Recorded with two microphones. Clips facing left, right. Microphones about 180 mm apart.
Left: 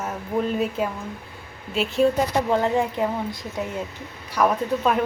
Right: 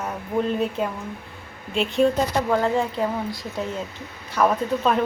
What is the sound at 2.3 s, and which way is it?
Speech, 20° left (ahead or behind).